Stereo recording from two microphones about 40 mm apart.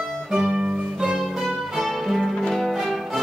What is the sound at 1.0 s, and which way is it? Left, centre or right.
Music, centre.